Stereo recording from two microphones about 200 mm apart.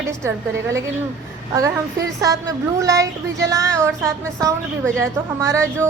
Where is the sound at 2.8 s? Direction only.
15° right (ahead or behind).